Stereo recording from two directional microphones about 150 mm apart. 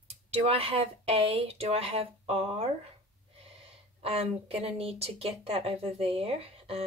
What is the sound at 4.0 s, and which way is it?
Speech, 40° right (ahead or behind).